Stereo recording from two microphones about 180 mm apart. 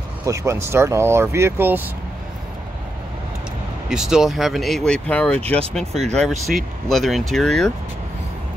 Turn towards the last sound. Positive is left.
turn(degrees=0)  # may be behind; listen again after turning